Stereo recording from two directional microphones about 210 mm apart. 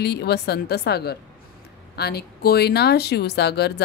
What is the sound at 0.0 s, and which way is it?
Speech, 50° left (ahead or behind).